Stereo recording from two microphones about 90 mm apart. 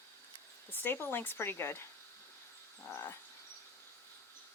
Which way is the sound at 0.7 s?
20° left (ahead or behind).